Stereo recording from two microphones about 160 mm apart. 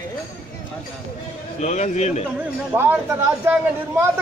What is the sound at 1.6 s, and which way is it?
Speech, 45° left (ahead or behind).